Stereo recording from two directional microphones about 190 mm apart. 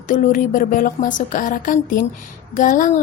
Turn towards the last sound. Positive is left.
turn(degrees=45)  # may be behind; listen again after turning